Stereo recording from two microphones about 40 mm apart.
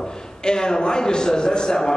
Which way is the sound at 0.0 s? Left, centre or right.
Centre.